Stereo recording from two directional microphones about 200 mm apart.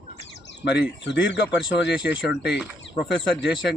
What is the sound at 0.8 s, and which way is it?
Speech, 60° left (ahead or behind).